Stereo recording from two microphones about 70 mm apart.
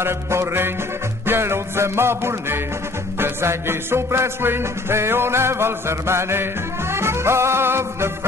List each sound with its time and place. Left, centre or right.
0.0 s music: right